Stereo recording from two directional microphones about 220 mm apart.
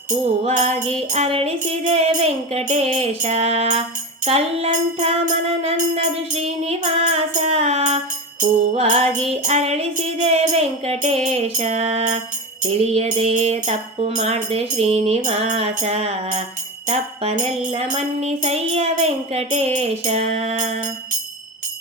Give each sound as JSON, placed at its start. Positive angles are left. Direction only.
{"t": 0.1, "sound": "music", "side_deg": -30}